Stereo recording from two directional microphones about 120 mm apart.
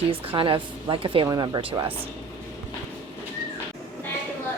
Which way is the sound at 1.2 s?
30° right (ahead or behind).